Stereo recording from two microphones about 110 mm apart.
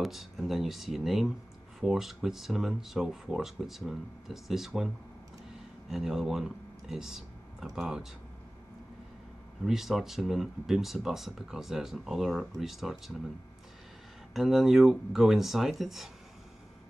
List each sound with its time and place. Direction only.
0.0 s speech: centre (ahead or behind)
9.7 s speech: centre (ahead or behind)
14.3 s speech: centre (ahead or behind)